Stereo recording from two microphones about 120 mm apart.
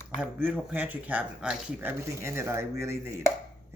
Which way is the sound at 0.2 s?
10° right (ahead or behind).